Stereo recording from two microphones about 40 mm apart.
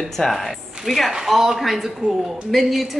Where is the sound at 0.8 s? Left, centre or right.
Centre.